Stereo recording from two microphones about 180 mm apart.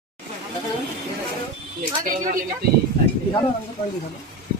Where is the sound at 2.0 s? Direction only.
50° right (ahead or behind).